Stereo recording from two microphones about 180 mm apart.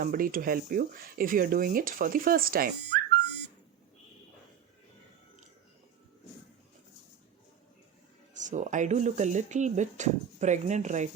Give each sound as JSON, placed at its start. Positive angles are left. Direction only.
{"t": 0.0, "sound": "speech", "side_deg": -55}
{"t": 8.4, "sound": "speech", "side_deg": -45}